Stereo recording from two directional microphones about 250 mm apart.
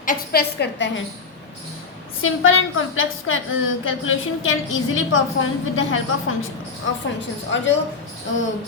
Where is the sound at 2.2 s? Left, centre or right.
Left.